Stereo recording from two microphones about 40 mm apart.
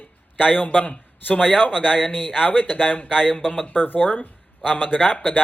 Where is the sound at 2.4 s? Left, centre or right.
Left.